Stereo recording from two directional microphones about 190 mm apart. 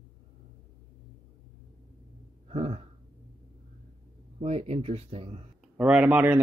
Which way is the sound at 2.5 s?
35° right (ahead or behind).